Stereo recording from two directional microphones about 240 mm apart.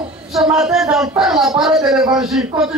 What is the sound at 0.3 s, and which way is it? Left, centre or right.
A man's voice, centre.